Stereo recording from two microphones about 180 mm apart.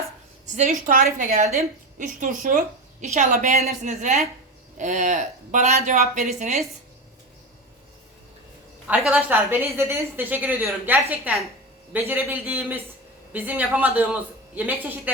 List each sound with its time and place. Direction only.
0.4 s a woman's voice: 40° right (ahead or behind)
8.9 s a woman's voice: 5° right (ahead or behind)